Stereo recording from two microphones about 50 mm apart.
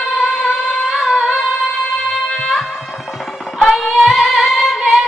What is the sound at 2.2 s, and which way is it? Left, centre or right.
Music, centre.